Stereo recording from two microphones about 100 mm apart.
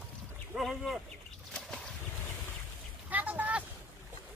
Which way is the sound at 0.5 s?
Centre (ahead or behind).